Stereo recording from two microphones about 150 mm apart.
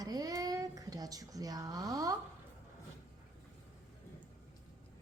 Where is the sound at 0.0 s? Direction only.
25° right (ahead or behind).